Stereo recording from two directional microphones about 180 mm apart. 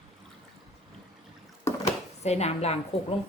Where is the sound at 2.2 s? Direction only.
35° left (ahead or behind).